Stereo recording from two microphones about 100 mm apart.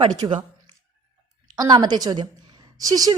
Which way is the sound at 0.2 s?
45° right (ahead or behind).